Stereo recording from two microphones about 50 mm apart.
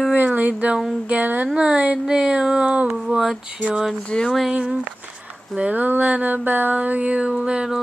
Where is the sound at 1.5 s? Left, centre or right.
Right.